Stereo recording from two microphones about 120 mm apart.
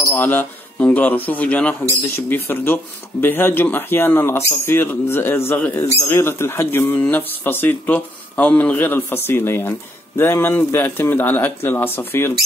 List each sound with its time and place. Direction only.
0.1 s speech: 15° left (ahead or behind)